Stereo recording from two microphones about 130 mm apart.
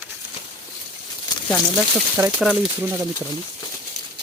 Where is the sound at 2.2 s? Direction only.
20° right (ahead or behind).